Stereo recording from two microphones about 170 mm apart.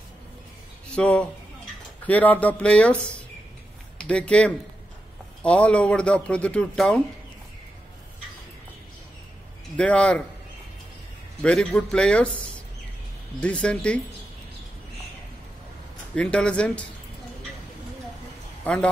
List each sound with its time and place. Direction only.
0.9 s a man's voice: 5° left (ahead or behind)
4.0 s speech: 5° left (ahead or behind)
9.8 s speech: 5° left (ahead or behind)
11.4 s a man's voice: 5° left (ahead or behind)
16.2 s speech: 5° left (ahead or behind)
18.6 s a man's voice: 5° left (ahead or behind)